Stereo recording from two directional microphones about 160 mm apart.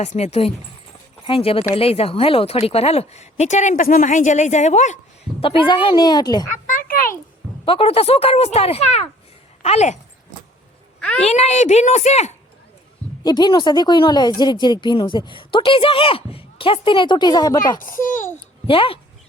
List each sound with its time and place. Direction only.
0.0 s speech: 45° left (ahead or behind)
5.4 s speech: 35° left (ahead or behind)
6.7 s a sound: 60° left (ahead or behind)
7.6 s speech: 35° left (ahead or behind)
11.2 s speech: 40° left (ahead or behind)
13.2 s speech: 25° left (ahead or behind)
17.7 s a child's voice: 60° left (ahead or behind)
18.7 s speech: 35° left (ahead or behind)